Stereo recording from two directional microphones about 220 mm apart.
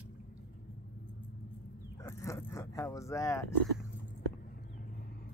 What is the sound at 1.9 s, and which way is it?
Speech, 15° left (ahead or behind).